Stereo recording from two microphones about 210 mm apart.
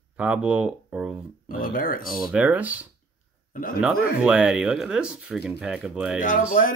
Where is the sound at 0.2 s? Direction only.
5° right (ahead or behind).